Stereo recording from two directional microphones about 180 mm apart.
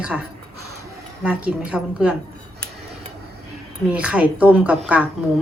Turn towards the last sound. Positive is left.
turn(degrees=-10)  # may be behind; listen again after turning